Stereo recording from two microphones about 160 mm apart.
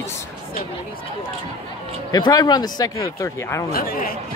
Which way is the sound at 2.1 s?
25° left (ahead or behind).